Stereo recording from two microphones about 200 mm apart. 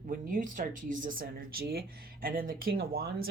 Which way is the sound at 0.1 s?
45° right (ahead or behind).